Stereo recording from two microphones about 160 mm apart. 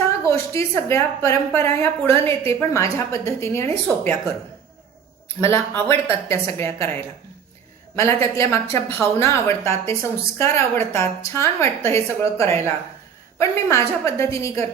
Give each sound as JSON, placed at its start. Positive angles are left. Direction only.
{"t": 0.3, "sound": "a woman's voice", "side_deg": 20}
{"t": 5.4, "sound": "a woman's voice", "side_deg": 15}
{"t": 7.9, "sound": "a woman's voice", "side_deg": 15}